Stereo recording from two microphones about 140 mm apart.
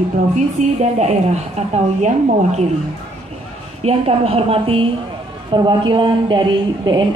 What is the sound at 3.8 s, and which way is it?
A woman's voice, 45° right (ahead or behind).